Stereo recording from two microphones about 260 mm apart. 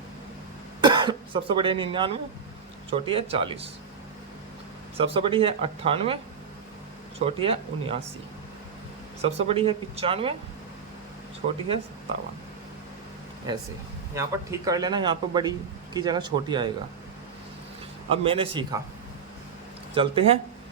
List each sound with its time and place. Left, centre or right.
0.8 s speech: centre
4.9 s speech: right
7.3 s speech: right
9.5 s speech: right
11.4 s speech: right
14.2 s a man's voice: centre
18.1 s speech: right
19.9 s speech: centre